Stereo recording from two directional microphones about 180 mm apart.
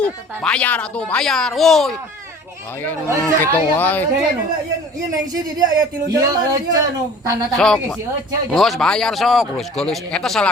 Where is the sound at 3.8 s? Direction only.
10° left (ahead or behind).